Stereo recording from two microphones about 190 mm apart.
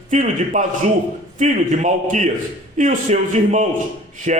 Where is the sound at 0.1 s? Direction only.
40° right (ahead or behind).